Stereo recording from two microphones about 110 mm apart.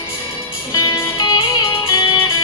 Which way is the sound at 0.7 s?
40° left (ahead or behind).